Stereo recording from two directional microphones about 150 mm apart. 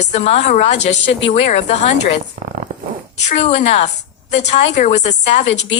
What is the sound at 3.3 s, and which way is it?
Speech, 45° left (ahead or behind).